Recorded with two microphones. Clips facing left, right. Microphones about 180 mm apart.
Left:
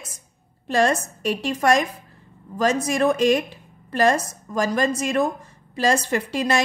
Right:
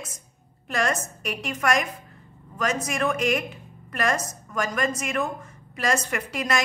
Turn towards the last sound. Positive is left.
turn(degrees=30)  # may be behind; listen again after turning